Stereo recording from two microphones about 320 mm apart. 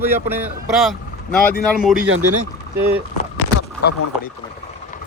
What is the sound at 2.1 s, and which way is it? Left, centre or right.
Speech, right.